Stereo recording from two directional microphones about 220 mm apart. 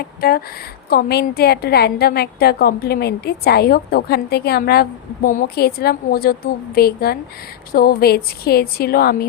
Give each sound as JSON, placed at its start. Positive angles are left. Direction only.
{"t": 0.0, "sound": "a woman's voice", "side_deg": 45}